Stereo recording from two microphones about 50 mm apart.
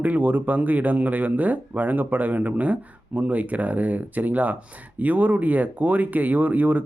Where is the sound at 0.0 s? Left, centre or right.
Right.